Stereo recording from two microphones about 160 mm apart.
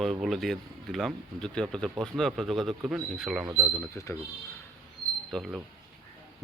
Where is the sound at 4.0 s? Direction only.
20° left (ahead or behind).